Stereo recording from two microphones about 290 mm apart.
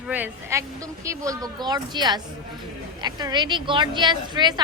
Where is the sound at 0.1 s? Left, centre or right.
Centre.